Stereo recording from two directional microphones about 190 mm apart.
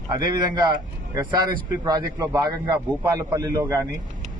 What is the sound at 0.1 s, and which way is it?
A man's voice, 25° right (ahead or behind).